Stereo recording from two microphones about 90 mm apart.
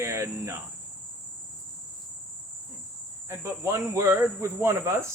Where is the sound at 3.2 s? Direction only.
30° right (ahead or behind).